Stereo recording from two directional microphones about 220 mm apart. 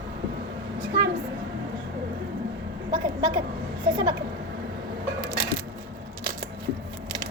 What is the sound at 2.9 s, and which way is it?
A child's voice, 20° right (ahead or behind).